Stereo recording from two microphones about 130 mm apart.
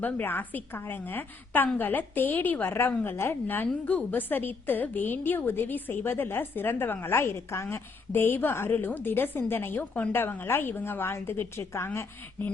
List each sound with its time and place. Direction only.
0.0 s a woman's voice: 15° left (ahead or behind)